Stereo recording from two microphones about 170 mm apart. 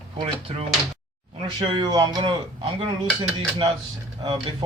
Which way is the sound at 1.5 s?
25° right (ahead or behind).